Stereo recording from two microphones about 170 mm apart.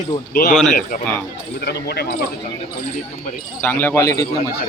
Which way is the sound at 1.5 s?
70° left (ahead or behind).